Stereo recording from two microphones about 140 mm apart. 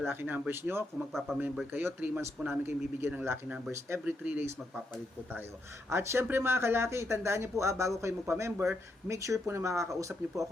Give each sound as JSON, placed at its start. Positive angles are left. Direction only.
{"t": 0.1, "sound": "speech", "side_deg": -15}
{"t": 5.9, "sound": "speech", "side_deg": -20}